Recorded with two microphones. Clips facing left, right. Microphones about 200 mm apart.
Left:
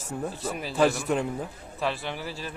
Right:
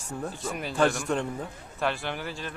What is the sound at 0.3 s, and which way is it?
A man's voice, centre (ahead or behind).